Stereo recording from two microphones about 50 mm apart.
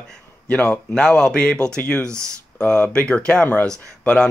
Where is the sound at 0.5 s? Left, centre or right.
Left.